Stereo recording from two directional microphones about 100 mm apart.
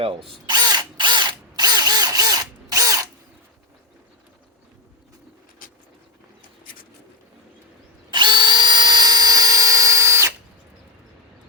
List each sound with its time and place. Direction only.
0.0 s speech: 65° right (ahead or behind)
0.4 s drill: 45° right (ahead or behind)
8.1 s drill: 50° right (ahead or behind); by 10.3 s 30° right (ahead or behind)